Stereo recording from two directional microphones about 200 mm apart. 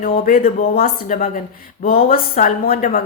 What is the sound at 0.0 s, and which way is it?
Speech, 45° left (ahead or behind).